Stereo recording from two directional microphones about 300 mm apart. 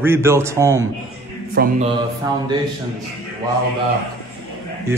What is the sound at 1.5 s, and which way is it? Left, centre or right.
Speech, right.